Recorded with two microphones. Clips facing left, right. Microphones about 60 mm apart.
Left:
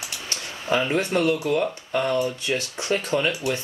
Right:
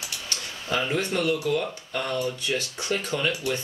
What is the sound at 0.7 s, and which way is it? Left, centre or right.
Speech, centre.